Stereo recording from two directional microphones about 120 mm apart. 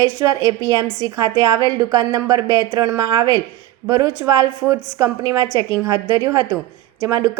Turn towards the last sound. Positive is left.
turn(degrees=-30)  # may be behind; listen again after turning